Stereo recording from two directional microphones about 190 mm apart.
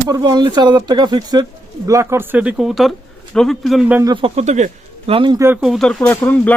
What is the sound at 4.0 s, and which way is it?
Speech, 20° right (ahead or behind).